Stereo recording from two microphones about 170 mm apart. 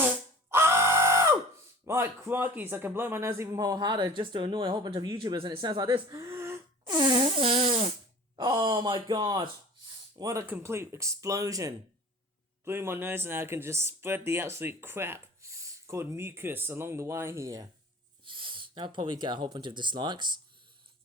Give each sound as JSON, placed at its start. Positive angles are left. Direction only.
{"t": 0.5, "sound": "a sound", "side_deg": -15}
{"t": 1.8, "sound": "speech", "side_deg": -15}
{"t": 18.3, "sound": "speech", "side_deg": -30}